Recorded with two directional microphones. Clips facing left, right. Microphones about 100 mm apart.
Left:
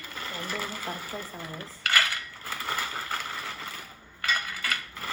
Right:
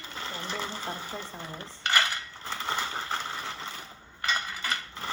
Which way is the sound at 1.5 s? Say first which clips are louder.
Even; 25° right (ahead or behind).